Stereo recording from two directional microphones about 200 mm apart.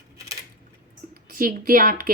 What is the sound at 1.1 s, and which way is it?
Speech, 45° right (ahead or behind).